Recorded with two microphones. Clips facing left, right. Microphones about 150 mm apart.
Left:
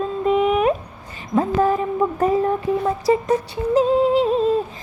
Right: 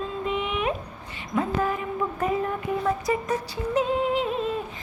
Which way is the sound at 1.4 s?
35° left (ahead or behind).